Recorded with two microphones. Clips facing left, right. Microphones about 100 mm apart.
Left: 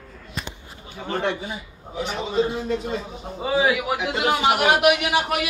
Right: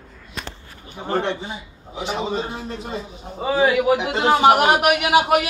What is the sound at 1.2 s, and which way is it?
A man's voice, 25° right (ahead or behind).